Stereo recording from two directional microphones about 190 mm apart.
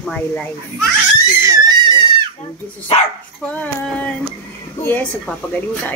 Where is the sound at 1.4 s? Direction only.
20° right (ahead or behind).